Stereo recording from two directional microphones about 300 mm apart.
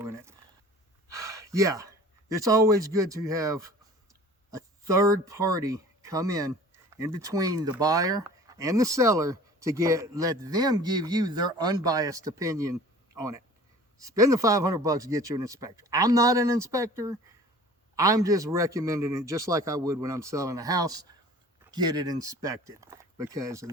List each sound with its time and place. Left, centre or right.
0.0 s a sound: centre
1.0 s gasp: centre
2.3 s speech: centre